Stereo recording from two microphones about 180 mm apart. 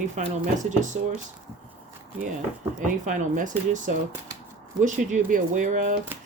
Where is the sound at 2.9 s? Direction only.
45° right (ahead or behind).